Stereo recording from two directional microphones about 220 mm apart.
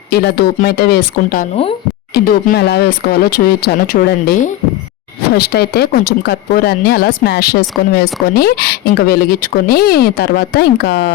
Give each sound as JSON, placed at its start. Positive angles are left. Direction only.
{"t": 0.1, "sound": "speech", "side_deg": 50}